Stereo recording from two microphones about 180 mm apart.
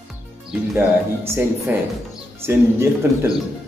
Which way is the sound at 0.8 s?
15° right (ahead or behind).